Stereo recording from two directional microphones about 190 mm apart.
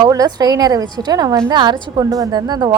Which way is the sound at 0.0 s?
20° right (ahead or behind).